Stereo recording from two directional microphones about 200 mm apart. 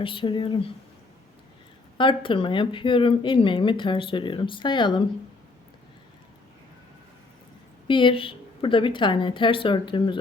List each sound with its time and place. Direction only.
0.0 s speech: 25° left (ahead or behind)
2.0 s speech: 25° left (ahead or behind)
7.9 s speech: 25° left (ahead or behind)